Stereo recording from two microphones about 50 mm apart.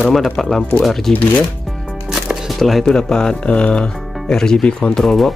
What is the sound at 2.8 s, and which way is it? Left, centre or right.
Speech, centre.